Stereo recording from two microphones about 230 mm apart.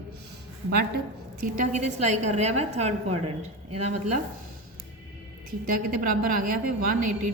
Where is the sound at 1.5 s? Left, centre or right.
Right.